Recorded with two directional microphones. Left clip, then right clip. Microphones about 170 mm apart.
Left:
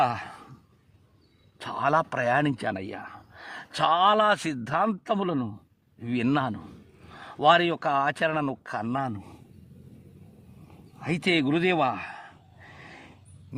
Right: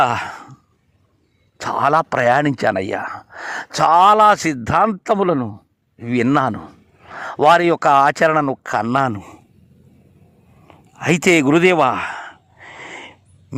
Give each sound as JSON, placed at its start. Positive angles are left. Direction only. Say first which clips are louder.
{"t": 0.0, "sound": "speech", "louder": "right 9 dB", "side_deg": -30}
{"t": 1.5, "sound": "speech", "louder": "right 9 dB", "side_deg": -30}
{"t": 3.8, "sound": "speech", "louder": "right 10 dB", "side_deg": -30}
{"t": 11.0, "sound": "gasp", "louder": "right 11 dB", "side_deg": -45}